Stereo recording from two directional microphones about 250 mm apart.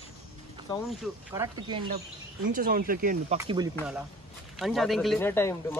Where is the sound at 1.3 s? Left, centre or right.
Centre.